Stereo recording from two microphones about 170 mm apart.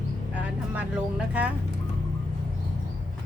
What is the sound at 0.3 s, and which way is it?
Vehicle, 10° right (ahead or behind).